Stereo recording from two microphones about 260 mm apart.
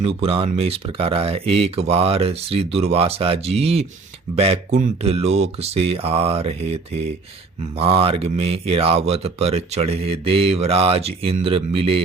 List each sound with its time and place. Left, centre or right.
0.0 s speech: right